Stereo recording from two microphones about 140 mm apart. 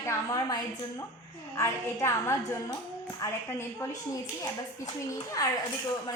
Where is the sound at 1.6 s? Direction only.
20° left (ahead or behind).